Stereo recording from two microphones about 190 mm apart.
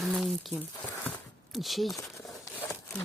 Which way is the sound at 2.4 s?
10° left (ahead or behind).